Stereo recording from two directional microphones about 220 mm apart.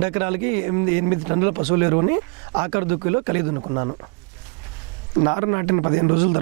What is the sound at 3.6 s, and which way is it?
Speech, 25° right (ahead or behind).